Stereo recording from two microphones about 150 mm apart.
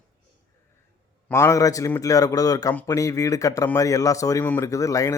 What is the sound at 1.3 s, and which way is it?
Speech, 20° left (ahead or behind).